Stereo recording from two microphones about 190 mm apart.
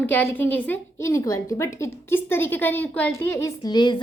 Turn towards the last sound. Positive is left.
turn(degrees=25)  # may be behind; listen again after turning